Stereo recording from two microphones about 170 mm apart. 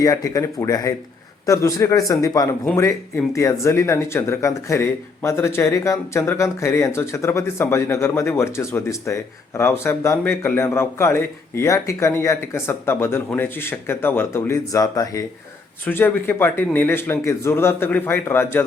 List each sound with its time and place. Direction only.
0.0 s a man's voice: 20° left (ahead or behind)